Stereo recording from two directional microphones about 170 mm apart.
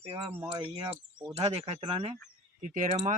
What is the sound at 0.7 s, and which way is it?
Speech, 25° right (ahead or behind).